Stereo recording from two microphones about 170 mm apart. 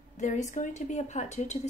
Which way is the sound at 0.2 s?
45° left (ahead or behind).